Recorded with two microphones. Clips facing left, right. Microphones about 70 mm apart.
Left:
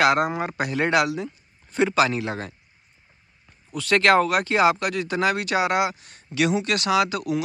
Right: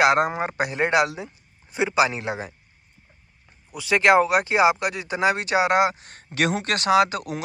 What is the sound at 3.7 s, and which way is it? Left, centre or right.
Speech, centre.